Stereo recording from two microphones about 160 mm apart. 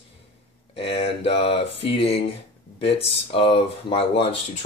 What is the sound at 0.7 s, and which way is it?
Speech, 35° left (ahead or behind).